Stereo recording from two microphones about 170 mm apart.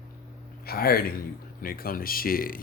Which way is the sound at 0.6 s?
65° left (ahead or behind).